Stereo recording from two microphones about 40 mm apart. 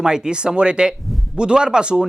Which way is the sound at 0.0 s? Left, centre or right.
Centre.